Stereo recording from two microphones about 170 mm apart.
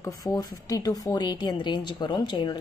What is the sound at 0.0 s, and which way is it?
Speech, 20° left (ahead or behind).